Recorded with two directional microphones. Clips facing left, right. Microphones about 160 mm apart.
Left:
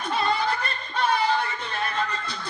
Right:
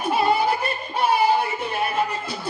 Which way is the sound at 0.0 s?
10° right (ahead or behind).